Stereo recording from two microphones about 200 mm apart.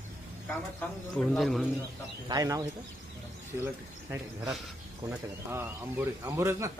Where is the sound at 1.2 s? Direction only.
Centre (ahead or behind).